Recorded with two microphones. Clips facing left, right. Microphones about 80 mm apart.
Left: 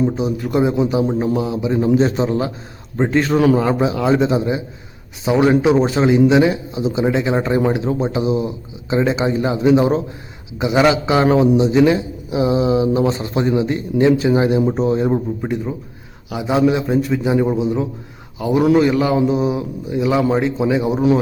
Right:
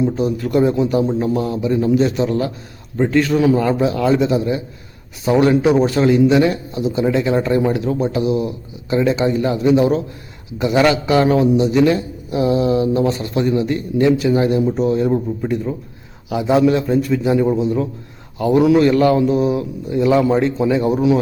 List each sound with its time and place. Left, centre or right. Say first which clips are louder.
0.2 s a man's voice: right 2 dB; centre
2.0 s speech: even; left
3.3 s speech: left 2 dB; left
3.6 s a man's voice: right 1 dB; centre
10.6 s a man's voice: even; centre
16.3 s a man's voice: right 2 dB; centre
16.8 s a man's voice: right 1 dB; centre
20.0 s a man's voice: right 2 dB; centre